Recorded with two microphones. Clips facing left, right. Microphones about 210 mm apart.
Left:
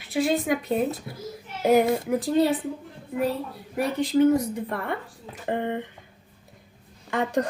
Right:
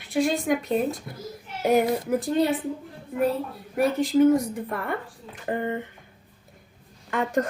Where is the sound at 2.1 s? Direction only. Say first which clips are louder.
Left 1 dB; centre (ahead or behind).